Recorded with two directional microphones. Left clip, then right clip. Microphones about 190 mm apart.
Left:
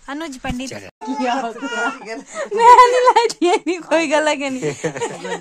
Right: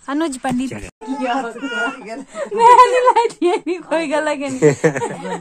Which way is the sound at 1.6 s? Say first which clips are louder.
Even; 55° left (ahead or behind).